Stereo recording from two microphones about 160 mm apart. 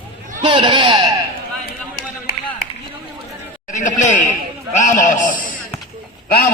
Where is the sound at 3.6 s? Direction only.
50° left (ahead or behind).